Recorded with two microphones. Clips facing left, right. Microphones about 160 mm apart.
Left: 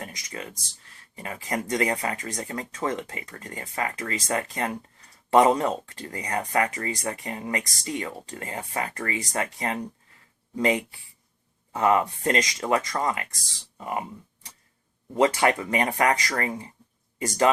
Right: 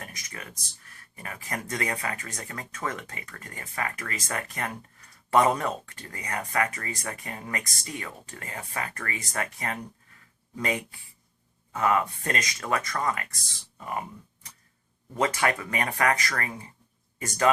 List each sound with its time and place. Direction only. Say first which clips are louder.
0.0 s a sound: left 5 dB; 25° left (ahead or behind)
0.9 s speech: left 5 dB; 25° left (ahead or behind)
15.1 s speech: left 5 dB; 25° left (ahead or behind)